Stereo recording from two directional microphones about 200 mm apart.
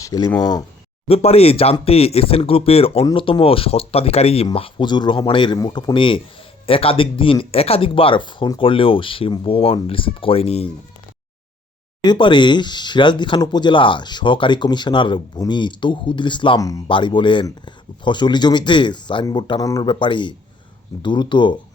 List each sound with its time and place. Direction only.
0.0 s speech: 20° left (ahead or behind)
1.0 s speech: 30° left (ahead or behind)
12.0 s speech: 25° left (ahead or behind)